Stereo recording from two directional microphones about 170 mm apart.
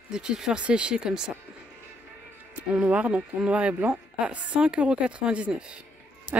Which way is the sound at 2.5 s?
10° right (ahead or behind).